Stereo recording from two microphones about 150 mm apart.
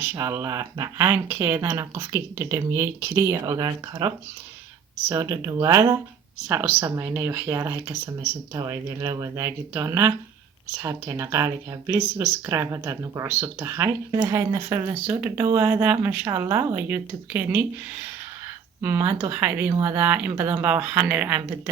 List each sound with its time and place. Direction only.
0.0 s speech: 15° right (ahead or behind)
6.5 s speech: 10° right (ahead or behind)
18.8 s speech: 15° right (ahead or behind)